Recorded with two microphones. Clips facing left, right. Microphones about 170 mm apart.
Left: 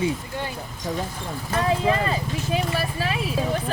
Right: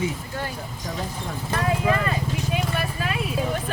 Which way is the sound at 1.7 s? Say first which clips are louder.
Left 1 dB; 25° left (ahead or behind).